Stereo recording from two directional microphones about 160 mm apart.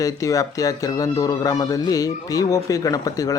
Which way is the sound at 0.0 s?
20° left (ahead or behind).